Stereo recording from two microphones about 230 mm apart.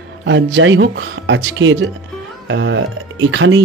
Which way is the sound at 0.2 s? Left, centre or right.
Right.